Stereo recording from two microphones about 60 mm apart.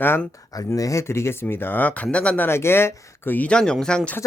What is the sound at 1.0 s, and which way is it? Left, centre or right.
Speech, left.